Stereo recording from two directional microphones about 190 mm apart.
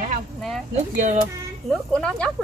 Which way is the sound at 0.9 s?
45° right (ahead or behind).